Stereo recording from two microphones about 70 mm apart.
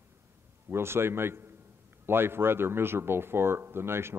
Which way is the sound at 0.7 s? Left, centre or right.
Right.